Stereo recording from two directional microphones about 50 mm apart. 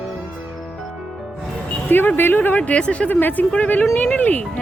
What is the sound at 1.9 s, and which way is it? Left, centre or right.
Speech, left.